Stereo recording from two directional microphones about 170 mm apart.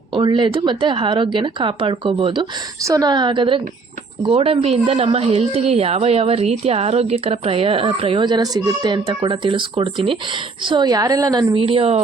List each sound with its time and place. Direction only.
0.1 s a woman's voice: 25° right (ahead or behind)